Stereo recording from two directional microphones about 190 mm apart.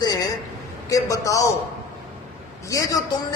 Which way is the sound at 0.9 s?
15° left (ahead or behind).